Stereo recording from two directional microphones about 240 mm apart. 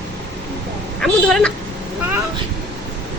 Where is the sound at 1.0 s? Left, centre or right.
Centre.